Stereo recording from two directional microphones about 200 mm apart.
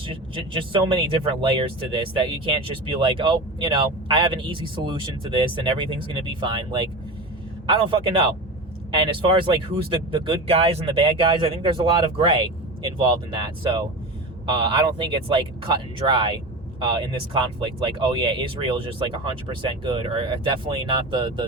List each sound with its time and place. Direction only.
0.0 s speech: 25° right (ahead or behind)